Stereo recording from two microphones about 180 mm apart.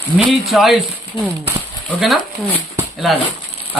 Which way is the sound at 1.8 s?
Centre (ahead or behind).